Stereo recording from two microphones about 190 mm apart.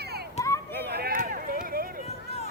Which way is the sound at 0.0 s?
55° right (ahead or behind).